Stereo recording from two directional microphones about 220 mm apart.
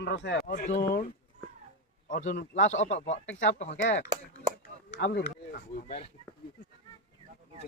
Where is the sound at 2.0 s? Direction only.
35° left (ahead or behind).